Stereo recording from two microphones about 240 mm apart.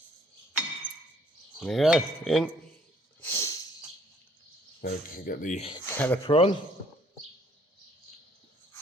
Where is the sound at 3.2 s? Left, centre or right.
Centre.